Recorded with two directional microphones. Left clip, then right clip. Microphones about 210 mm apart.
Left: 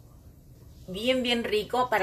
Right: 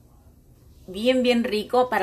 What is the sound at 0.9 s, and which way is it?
Speech, 40° right (ahead or behind).